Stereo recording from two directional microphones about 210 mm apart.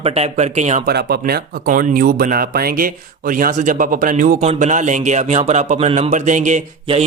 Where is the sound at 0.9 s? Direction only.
50° right (ahead or behind).